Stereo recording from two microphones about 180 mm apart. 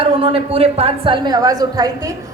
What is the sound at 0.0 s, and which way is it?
A woman's voice, 30° right (ahead or behind).